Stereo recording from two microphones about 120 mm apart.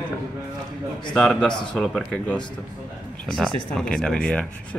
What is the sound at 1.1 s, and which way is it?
Speech, 5° left (ahead or behind).